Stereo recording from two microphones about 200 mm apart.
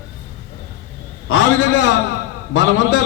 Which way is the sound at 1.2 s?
65° left (ahead or behind).